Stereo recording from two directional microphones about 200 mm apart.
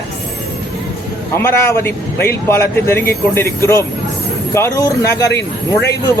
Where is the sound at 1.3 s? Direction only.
10° left (ahead or behind).